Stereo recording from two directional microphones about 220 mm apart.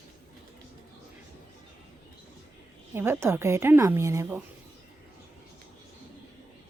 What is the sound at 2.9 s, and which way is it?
Speech, 10° right (ahead or behind).